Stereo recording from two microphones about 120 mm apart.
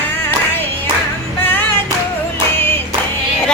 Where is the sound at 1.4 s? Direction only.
15° left (ahead or behind).